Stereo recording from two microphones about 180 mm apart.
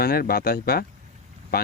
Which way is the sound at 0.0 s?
55° left (ahead or behind).